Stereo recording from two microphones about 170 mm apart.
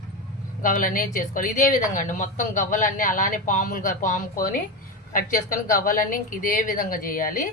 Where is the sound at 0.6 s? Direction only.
50° left (ahead or behind).